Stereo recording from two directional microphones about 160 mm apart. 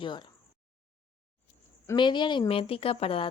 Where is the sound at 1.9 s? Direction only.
30° left (ahead or behind).